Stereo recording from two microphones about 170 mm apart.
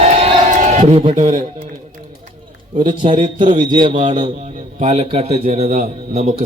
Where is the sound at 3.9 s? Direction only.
45° right (ahead or behind).